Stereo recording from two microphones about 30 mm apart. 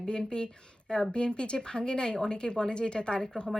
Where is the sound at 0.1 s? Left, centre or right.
Left.